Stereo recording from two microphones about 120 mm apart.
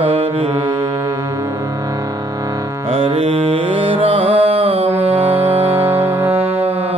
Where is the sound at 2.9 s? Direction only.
55° right (ahead or behind).